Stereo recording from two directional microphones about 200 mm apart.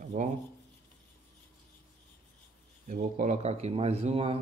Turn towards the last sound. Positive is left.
turn(degrees=-30)  # may be behind; listen again after turning